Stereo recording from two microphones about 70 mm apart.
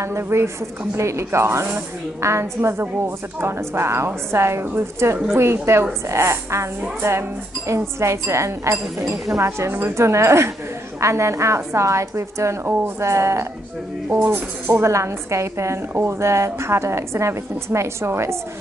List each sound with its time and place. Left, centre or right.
0.0 s a woman's voice: right